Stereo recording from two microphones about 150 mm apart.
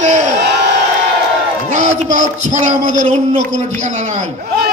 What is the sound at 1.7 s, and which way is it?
Speech, 50° right (ahead or behind).